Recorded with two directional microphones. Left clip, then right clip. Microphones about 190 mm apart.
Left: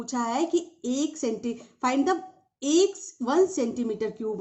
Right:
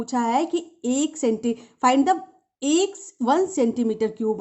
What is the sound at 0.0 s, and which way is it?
A woman's voice, 35° right (ahead or behind).